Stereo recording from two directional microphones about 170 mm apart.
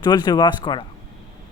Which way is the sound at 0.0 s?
25° left (ahead or behind).